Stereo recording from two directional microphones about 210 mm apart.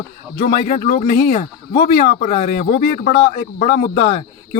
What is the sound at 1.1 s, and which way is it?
A man's voice, 50° left (ahead or behind).